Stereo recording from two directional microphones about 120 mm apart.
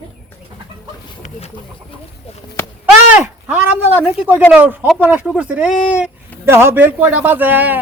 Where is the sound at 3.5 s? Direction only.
15° right (ahead or behind).